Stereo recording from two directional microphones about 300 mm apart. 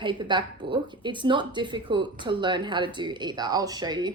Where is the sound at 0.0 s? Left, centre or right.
Centre.